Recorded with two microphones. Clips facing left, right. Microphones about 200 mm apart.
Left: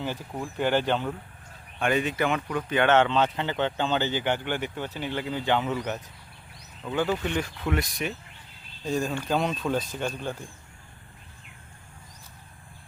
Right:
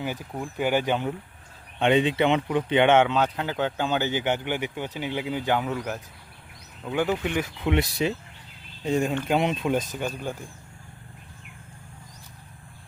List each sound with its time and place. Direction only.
0.3 s speech: 10° right (ahead or behind)
1.8 s speech: 25° right (ahead or behind)
7.6 s speech: 25° right (ahead or behind)